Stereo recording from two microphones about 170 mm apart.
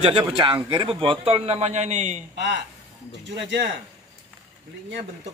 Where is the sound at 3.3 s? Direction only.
90° right.